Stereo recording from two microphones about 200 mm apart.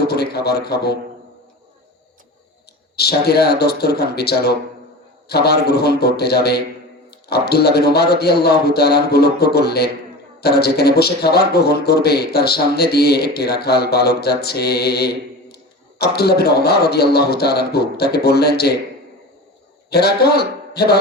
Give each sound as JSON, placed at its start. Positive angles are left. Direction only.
{"t": 0.0, "sound": "a sound", "side_deg": 55}
{"t": 2.9, "sound": "a man's voice", "side_deg": 55}
{"t": 19.9, "sound": "a man's voice", "side_deg": 50}